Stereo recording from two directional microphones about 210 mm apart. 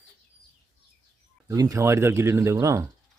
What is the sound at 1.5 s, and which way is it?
Speech, 15° right (ahead or behind).